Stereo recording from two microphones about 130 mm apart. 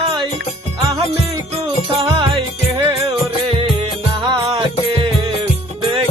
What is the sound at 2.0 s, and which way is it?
Music, 40° right (ahead or behind).